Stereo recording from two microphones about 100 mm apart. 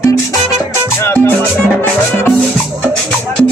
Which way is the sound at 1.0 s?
25° left (ahead or behind).